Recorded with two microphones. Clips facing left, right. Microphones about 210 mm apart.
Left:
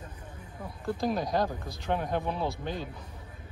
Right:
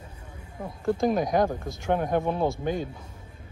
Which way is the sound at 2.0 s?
50° right (ahead or behind).